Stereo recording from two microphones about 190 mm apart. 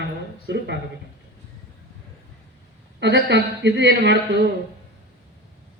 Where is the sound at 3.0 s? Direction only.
65° right (ahead or behind).